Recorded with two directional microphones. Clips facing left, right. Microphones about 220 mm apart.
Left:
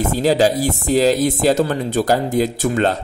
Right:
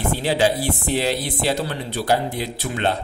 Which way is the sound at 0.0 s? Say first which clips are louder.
Left 5 dB; 40° left (ahead or behind).